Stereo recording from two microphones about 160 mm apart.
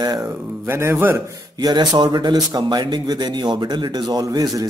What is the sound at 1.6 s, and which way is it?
Speech, 25° right (ahead or behind).